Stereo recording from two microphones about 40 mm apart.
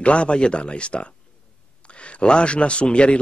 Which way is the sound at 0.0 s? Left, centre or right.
Left.